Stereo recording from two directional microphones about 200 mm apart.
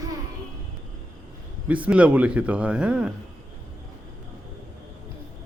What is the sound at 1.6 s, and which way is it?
A man's voice, 5° right (ahead or behind).